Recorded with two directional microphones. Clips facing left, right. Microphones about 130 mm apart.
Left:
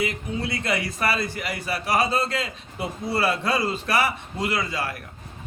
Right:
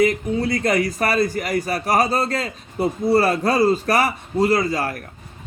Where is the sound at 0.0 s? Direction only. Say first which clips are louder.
Right 9 dB; 40° right (ahead or behind).